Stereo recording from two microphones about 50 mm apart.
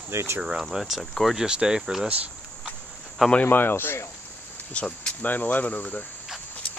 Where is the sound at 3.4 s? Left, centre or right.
Left.